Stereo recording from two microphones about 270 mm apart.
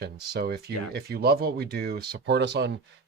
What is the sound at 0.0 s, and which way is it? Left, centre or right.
Speech, right.